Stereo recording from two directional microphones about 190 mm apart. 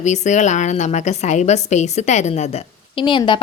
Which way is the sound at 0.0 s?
40° left (ahead or behind).